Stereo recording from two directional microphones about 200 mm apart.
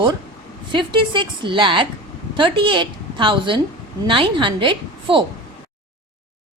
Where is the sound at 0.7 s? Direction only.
25° right (ahead or behind).